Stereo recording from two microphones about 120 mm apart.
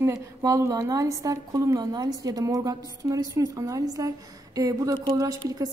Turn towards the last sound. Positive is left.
turn(degrees=-30)  # may be behind; listen again after turning